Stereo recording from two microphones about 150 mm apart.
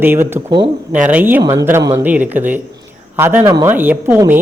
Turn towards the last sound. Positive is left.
turn(degrees=-15)  # may be behind; listen again after turning